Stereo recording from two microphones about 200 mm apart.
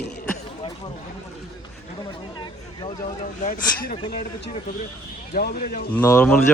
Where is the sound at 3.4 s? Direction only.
45° left (ahead or behind).